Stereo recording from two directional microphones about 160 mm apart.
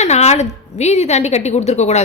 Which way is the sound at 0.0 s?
45° left (ahead or behind).